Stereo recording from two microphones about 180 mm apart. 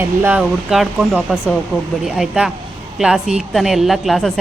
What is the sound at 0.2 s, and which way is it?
A woman's voice, 5° right (ahead or behind).